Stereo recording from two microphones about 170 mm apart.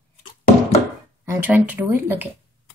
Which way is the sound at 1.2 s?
15° right (ahead or behind).